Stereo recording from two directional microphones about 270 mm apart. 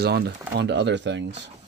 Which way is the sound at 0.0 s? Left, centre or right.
Right.